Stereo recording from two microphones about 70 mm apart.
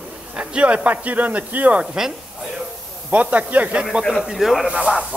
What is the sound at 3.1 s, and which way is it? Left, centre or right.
Speech, right.